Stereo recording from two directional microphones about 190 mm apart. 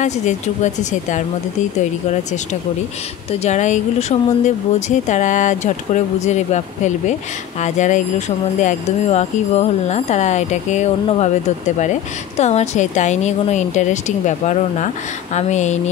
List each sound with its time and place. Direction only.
0.0 s speech: 40° left (ahead or behind)
3.3 s speech: 35° left (ahead or behind)